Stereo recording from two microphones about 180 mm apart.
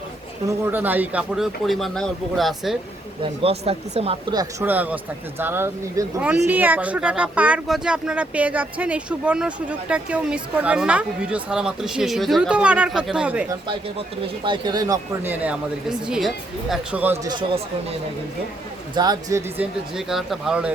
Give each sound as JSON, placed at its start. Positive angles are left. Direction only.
{"t": 0.4, "sound": "speech", "side_deg": -10}
{"t": 3.4, "sound": "speech", "side_deg": -35}
{"t": 4.6, "sound": "speech", "side_deg": -10}
{"t": 14.4, "sound": "speech", "side_deg": -25}
{"t": 17.2, "sound": "speech", "side_deg": -25}
{"t": 18.9, "sound": "speech", "side_deg": -20}
{"t": 19.5, "sound": "speech", "side_deg": 0}